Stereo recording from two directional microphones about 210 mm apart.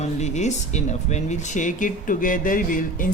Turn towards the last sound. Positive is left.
turn(degrees=40)  # may be behind; listen again after turning